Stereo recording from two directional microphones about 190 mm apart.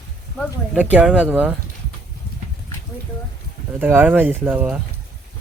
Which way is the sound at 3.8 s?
10° right (ahead or behind).